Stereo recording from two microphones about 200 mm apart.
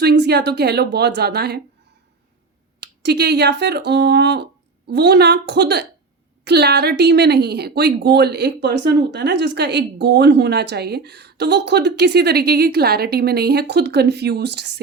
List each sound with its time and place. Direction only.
0.0 s a woman's voice: 55° right (ahead or behind)
2.8 s a woman's voice: 55° right (ahead or behind)